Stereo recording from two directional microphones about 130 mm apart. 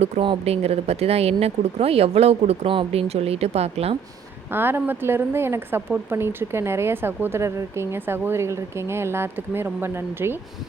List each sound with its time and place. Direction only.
0.0 s speech: 45° right (ahead or behind)
4.5 s a woman's voice: 15° right (ahead or behind)